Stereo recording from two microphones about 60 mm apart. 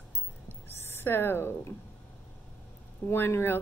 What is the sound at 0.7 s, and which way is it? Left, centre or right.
A woman's voice, left.